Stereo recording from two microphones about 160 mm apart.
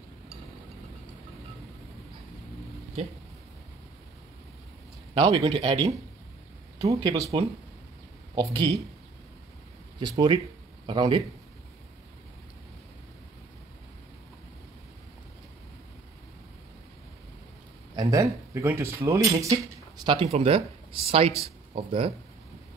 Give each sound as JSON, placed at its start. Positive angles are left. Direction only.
{"t": 5.1, "sound": "speech", "side_deg": -35}
{"t": 6.9, "sound": "speech", "side_deg": -25}
{"t": 8.4, "sound": "speech", "side_deg": -25}
{"t": 9.9, "sound": "speech", "side_deg": -30}
{"t": 17.9, "sound": "speech", "side_deg": -20}
{"t": 20.0, "sound": "speech", "side_deg": -30}